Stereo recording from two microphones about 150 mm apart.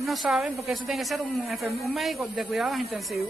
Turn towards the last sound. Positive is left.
turn(degrees=0)  # may be behind; listen again after turning